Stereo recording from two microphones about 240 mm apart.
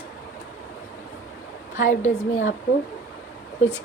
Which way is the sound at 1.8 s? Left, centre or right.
Left.